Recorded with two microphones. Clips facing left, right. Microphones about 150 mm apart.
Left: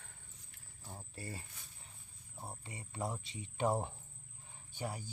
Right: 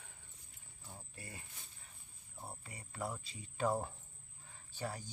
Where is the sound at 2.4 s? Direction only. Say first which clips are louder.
Left 2 dB; 20° left (ahead or behind).